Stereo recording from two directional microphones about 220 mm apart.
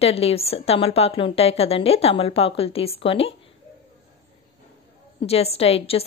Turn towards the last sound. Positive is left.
turn(degrees=25)  # may be behind; listen again after turning